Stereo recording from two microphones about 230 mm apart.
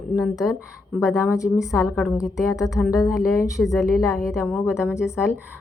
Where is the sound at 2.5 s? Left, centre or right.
Centre.